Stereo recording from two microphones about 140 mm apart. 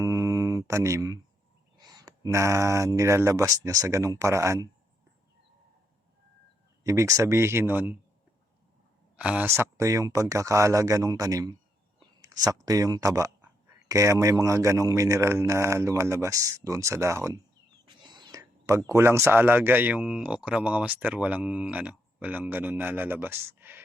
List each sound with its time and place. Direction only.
0.0 s mantra: 20° right (ahead or behind)
1.8 s speech: 30° right (ahead or behind)
6.8 s speech: 20° right (ahead or behind)
9.1 s speech: 10° right (ahead or behind)
17.8 s whispering: 30° right (ahead or behind)
18.9 s speech: 20° right (ahead or behind)